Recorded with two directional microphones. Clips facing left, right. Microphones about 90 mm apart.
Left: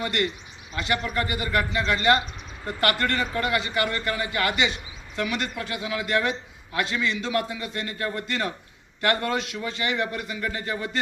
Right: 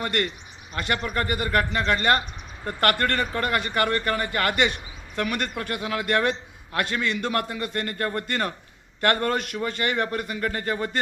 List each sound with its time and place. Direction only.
0.0 s a man's voice: 45° right (ahead or behind)